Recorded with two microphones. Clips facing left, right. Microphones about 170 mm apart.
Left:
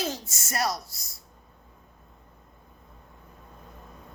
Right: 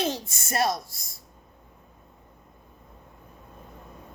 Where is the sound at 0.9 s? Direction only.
25° left (ahead or behind).